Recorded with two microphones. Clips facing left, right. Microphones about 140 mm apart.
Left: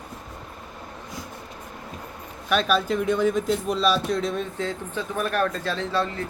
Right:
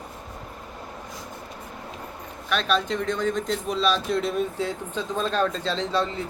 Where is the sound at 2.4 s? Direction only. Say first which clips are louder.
Left 2 dB; 5° left (ahead or behind).